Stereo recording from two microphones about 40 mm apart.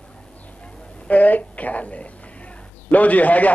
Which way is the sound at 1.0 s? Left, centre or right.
Left.